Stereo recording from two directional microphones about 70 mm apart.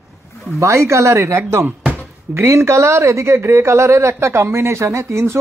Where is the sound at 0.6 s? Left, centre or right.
Right.